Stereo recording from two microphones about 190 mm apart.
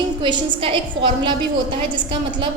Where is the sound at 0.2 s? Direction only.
25° right (ahead or behind).